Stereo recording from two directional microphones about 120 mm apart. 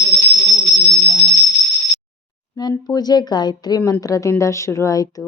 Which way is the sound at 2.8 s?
35° left (ahead or behind).